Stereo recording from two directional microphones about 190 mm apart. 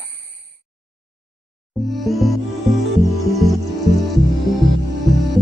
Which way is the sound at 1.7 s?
Centre (ahead or behind).